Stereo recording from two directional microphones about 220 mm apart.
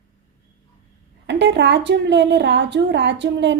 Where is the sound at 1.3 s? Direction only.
50° right (ahead or behind).